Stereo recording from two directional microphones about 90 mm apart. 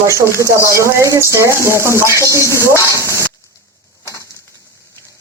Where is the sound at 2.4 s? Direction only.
35° left (ahead or behind).